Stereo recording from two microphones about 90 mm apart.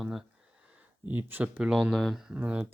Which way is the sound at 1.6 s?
10° right (ahead or behind).